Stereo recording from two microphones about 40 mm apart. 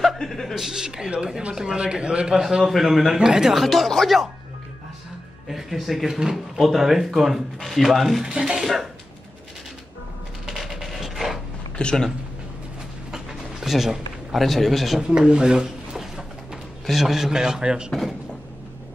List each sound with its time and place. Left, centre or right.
0.0 s speech: centre
0.6 s a man's voice: centre
2.6 s speech: centre
3.2 s speech: centre
3.5 s speech: centre
5.5 s speech: centre
8.2 s a man's voice: centre
10.4 s mechanisms: centre
11.8 s speech: left
13.1 s a sound: centre
14.4 s speech: centre
15.0 s a man's voice: centre